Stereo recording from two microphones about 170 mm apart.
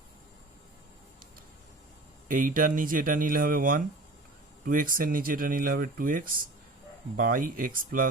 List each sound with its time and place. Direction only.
2.2 s speech: 50° right (ahead or behind)